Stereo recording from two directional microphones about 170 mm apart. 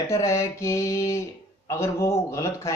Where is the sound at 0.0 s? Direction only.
15° left (ahead or behind).